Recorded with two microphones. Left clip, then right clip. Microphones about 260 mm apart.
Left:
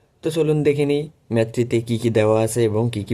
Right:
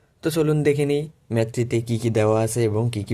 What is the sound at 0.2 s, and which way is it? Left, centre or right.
Speech, right.